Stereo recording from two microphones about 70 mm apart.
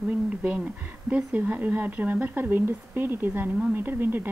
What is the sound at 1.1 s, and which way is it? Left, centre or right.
A woman's voice, right.